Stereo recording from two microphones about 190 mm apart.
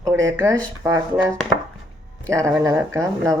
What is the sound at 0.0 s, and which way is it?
Speech, 15° right (ahead or behind).